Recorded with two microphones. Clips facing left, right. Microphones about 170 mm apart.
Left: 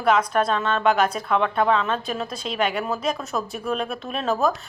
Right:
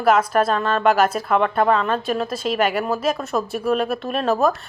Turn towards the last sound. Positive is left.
turn(degrees=0)  # may be behind; listen again after turning